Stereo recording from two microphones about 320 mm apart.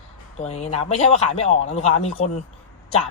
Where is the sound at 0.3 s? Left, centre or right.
Centre.